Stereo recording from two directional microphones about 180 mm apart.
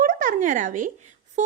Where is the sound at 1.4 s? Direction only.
40° right (ahead or behind).